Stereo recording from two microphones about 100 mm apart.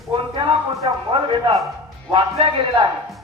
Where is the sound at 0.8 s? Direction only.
65° right (ahead or behind).